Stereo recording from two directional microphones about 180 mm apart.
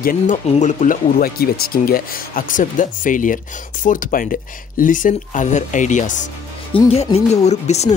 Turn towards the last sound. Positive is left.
turn(degrees=35)  # may be behind; listen again after turning